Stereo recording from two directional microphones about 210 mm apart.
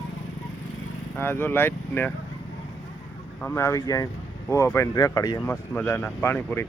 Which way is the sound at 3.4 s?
10° left (ahead or behind).